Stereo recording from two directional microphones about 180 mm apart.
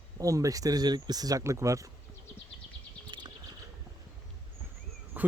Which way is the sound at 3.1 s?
25° right (ahead or behind).